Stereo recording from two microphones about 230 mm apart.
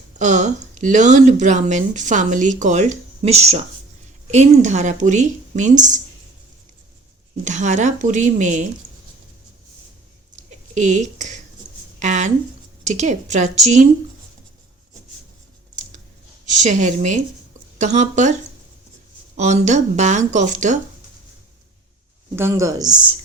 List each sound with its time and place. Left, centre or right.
0.2 s speech: right
7.4 s speech: right
10.3 s a sound: right
12.8 s speech: right
16.6 s speech: right
19.4 s speech: right
22.4 s speech: centre